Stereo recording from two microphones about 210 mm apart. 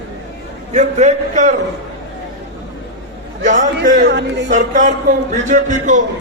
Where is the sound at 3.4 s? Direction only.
35° right (ahead or behind).